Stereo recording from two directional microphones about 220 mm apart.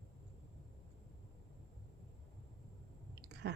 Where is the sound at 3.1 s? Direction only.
50° right (ahead or behind).